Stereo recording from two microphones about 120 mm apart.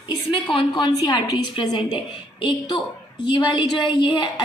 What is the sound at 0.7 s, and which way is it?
A woman's voice, 35° left (ahead or behind).